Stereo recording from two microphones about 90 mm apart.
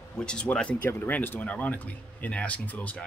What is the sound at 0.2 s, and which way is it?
Speech, 10° left (ahead or behind).